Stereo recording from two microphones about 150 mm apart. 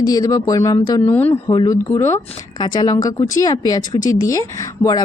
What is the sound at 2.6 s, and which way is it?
Speech, 30° left (ahead or behind).